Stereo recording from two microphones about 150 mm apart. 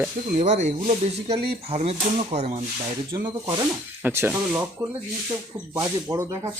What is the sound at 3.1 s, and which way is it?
Speech, 25° right (ahead or behind).